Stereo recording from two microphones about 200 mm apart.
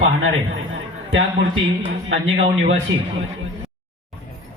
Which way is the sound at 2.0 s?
65° right (ahead or behind).